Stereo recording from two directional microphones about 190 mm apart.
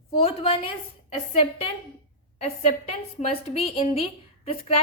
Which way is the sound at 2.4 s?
30° left (ahead or behind).